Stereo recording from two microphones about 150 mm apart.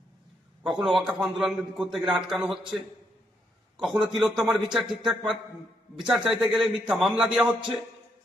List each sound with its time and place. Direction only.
0.6 s a man's voice: 5° right (ahead or behind)
3.8 s a man's voice: 5° right (ahead or behind)